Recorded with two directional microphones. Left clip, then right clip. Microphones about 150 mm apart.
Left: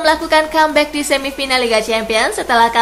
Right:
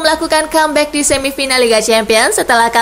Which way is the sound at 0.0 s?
25° right (ahead or behind).